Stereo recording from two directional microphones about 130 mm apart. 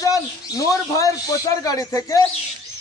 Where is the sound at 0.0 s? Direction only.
25° left (ahead or behind).